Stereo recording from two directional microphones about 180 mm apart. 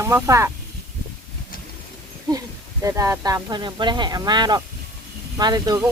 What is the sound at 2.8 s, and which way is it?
Speech, 15° right (ahead or behind).